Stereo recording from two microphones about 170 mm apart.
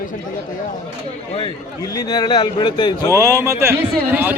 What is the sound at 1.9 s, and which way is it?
Speech, 20° left (ahead or behind).